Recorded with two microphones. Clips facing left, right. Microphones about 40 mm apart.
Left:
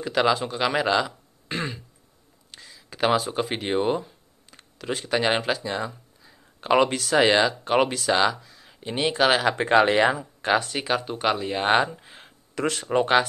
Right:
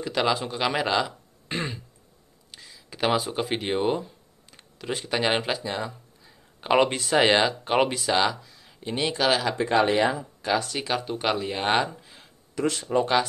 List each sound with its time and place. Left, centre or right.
0.0 s speech: centre
9.3 s speech: left
9.6 s speech: left
10.6 s speech: left
10.9 s speech: centre
12.0 s a sound: left
12.5 s speech: left
12.8 s speech: left